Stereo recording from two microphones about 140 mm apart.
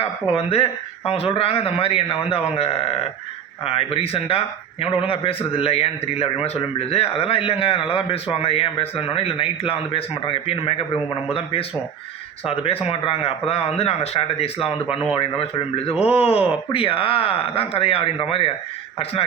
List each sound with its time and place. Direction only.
0.0 s speech: 45° left (ahead or behind)